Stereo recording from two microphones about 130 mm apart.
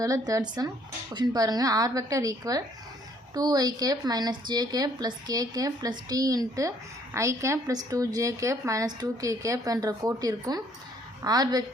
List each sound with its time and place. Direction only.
0.0 s speech: 25° right (ahead or behind)